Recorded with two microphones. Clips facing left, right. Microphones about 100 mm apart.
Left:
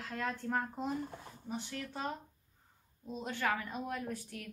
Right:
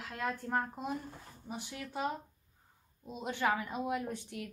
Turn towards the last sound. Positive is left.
turn(degrees=-20)  # may be behind; listen again after turning